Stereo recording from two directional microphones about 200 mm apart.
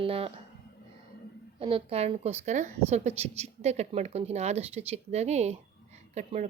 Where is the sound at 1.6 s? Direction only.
30° right (ahead or behind).